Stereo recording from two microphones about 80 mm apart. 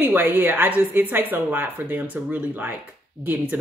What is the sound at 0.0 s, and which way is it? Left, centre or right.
A woman's voice, right.